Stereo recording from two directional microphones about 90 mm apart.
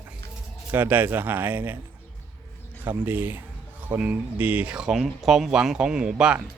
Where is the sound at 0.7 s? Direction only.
20° right (ahead or behind).